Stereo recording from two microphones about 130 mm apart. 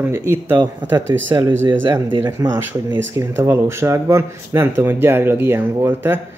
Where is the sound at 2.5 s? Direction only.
15° right (ahead or behind).